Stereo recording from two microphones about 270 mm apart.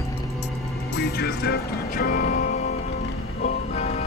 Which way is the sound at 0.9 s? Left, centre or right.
Left.